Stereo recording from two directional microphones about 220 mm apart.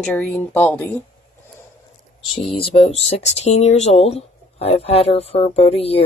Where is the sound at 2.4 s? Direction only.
25° left (ahead or behind).